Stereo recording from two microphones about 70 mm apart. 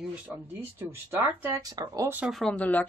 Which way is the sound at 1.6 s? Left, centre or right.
Right.